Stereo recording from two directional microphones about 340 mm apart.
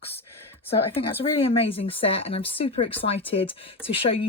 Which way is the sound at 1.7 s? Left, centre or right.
Centre.